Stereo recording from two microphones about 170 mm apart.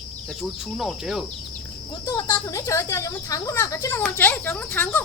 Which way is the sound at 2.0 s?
20° left (ahead or behind).